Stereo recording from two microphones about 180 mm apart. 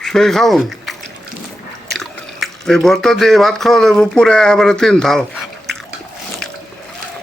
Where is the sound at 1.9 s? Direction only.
Centre (ahead or behind).